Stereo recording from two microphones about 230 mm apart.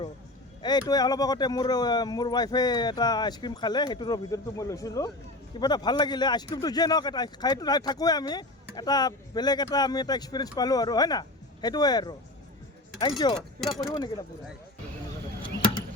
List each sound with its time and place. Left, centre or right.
0.6 s speech: centre
13.3 s speech: centre
13.9 s speech: centre